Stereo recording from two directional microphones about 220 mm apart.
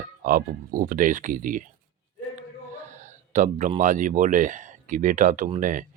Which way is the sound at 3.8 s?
35° right (ahead or behind).